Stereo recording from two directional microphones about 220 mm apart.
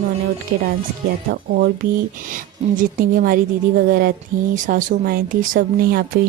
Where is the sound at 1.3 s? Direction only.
40° right (ahead or behind).